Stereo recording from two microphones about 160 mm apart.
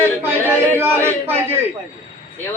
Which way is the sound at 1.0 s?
10° right (ahead or behind).